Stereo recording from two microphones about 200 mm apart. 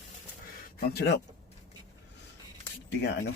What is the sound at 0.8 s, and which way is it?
Speech, 55° left (ahead or behind).